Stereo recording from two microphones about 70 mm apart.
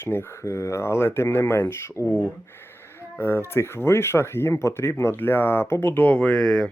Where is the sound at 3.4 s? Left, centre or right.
Left.